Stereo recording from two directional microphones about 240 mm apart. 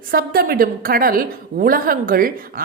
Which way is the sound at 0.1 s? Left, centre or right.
Right.